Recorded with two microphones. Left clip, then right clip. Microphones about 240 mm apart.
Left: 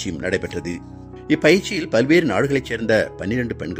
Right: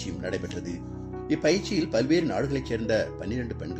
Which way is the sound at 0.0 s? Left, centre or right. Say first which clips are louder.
Left 9 dB; left.